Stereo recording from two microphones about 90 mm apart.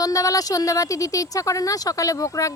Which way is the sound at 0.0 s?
40° left (ahead or behind).